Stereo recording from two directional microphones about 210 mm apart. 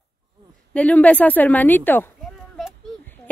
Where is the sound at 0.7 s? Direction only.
5° left (ahead or behind).